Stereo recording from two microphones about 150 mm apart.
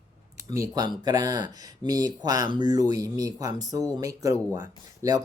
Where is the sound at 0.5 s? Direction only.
25° right (ahead or behind).